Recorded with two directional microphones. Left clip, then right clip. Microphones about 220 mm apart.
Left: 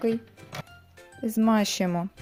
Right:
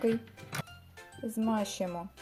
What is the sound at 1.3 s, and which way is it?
Speech, 35° left (ahead or behind).